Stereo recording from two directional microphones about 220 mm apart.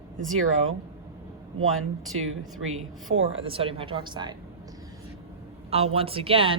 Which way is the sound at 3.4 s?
25° right (ahead or behind).